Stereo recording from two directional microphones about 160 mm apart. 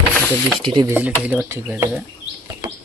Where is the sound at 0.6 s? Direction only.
30° right (ahead or behind).